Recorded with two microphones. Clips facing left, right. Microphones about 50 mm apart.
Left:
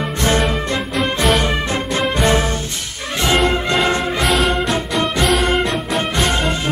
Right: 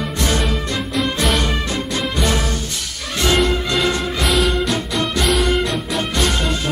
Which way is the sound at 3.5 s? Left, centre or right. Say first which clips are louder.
Left 2 dB; left.